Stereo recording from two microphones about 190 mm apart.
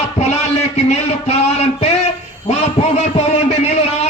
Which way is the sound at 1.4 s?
35° left (ahead or behind).